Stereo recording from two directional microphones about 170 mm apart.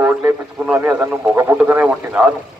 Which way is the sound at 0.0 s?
10° right (ahead or behind).